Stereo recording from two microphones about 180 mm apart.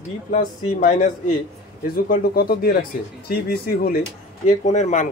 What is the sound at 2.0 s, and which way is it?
Speech, 55° left (ahead or behind).